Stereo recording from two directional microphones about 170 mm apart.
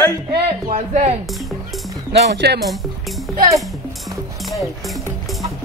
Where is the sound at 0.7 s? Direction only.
40° right (ahead or behind).